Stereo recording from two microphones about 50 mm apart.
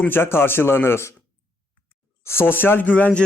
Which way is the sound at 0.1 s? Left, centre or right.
Left.